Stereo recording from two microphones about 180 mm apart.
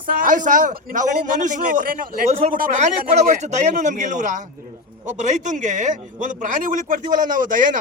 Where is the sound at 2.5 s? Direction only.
40° right (ahead or behind).